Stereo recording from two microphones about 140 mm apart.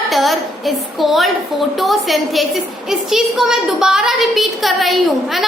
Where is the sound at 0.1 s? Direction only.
Centre (ahead or behind).